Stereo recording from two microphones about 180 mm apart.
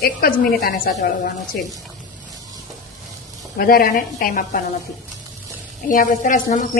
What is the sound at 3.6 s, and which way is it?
A woman's voice, 55° left (ahead or behind).